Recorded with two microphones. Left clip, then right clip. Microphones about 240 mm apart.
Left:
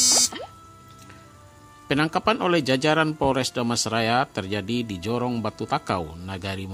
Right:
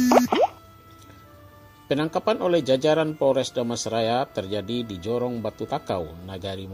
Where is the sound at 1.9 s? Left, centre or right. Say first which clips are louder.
Left 1 dB; left.